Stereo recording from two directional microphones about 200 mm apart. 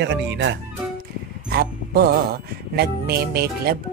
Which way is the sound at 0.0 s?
60° right (ahead or behind).